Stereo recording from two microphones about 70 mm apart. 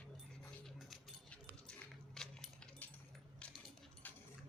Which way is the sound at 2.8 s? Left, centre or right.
Left.